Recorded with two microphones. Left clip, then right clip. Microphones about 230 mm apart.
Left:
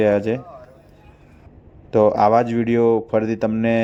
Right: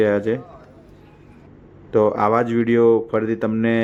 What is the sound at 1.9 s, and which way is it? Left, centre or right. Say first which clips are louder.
Speech: left 2 dB; centre.